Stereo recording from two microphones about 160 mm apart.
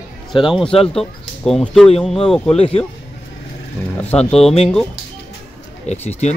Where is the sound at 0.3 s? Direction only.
Centre (ahead or behind).